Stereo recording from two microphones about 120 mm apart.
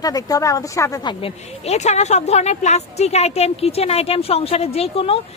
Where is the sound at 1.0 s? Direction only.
40° left (ahead or behind).